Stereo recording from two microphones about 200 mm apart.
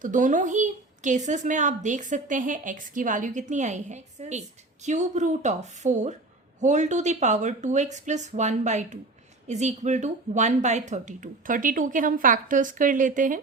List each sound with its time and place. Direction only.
0.0 s a woman's voice: 40° right (ahead or behind)